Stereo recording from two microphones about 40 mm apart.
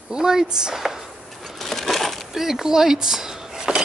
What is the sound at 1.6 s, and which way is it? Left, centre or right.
Crushing, centre.